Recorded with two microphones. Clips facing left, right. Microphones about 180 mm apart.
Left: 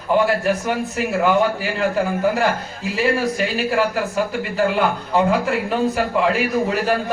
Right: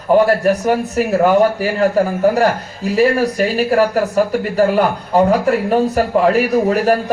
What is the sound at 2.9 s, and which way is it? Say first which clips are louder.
Speech: right 6 dB; 40° right (ahead or behind).